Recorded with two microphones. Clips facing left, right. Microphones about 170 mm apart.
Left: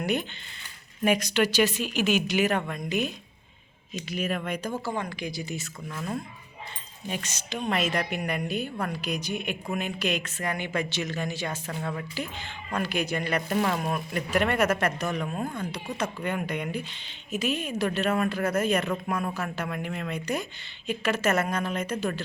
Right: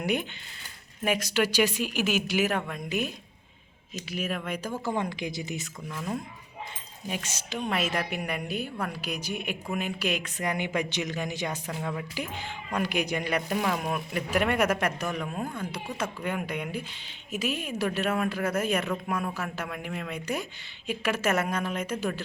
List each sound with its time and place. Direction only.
0.0 s a woman's voice: 10° right (ahead or behind)
4.1 s speech: 5° right (ahead or behind)
4.9 s speech: 20° right (ahead or behind)
5.9 s a woman's voice: centre (ahead or behind)